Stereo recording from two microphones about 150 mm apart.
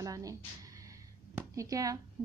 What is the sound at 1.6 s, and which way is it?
Speech, 20° right (ahead or behind).